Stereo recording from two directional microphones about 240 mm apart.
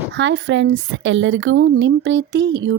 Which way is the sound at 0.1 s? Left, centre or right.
Right.